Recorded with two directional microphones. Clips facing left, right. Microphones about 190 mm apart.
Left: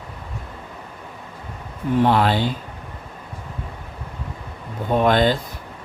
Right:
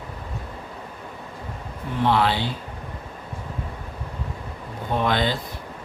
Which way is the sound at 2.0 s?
45° left (ahead or behind).